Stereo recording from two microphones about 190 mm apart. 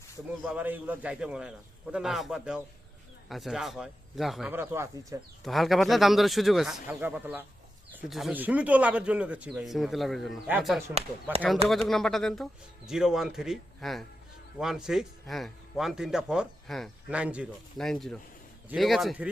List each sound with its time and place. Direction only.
0.4 s a man's voice: 10° right (ahead or behind)
4.5 s speech: 15° right (ahead or behind)
5.4 s a man's voice: centre (ahead or behind)
10.9 s speech: 30° right (ahead or behind)
11.7 s a man's voice: centre (ahead or behind)